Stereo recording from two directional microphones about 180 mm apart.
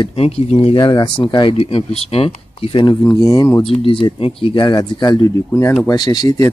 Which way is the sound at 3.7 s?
30° left (ahead or behind).